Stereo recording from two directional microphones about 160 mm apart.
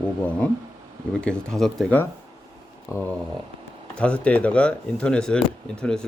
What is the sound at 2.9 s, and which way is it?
Speech, 20° left (ahead or behind).